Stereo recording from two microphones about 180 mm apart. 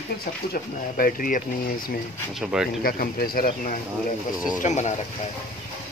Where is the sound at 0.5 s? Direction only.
50° left (ahead or behind).